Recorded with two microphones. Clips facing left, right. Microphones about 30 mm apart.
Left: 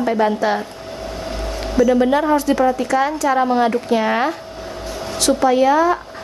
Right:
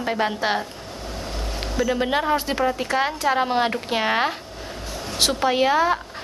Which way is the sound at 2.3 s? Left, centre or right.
Right.